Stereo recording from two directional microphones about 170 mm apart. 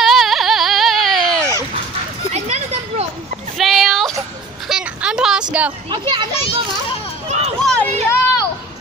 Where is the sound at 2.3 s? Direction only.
40° right (ahead or behind).